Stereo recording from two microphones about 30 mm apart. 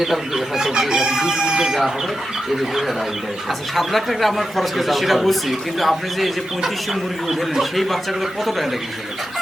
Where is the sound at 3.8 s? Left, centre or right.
Centre.